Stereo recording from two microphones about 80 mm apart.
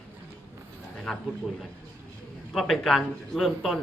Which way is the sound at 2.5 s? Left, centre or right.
Centre.